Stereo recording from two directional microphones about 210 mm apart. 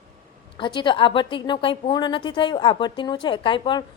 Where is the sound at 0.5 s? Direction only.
20° left (ahead or behind).